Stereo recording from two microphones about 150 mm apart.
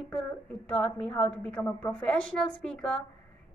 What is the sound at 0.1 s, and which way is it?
A woman's voice, 5° left (ahead or behind).